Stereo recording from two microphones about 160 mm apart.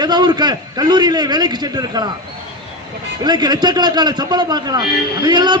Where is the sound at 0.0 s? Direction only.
25° right (ahead or behind).